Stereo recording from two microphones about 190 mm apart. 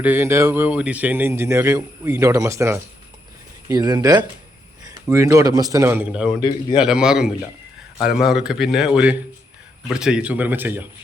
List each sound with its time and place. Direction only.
0.0 s a man's voice: 10° right (ahead or behind)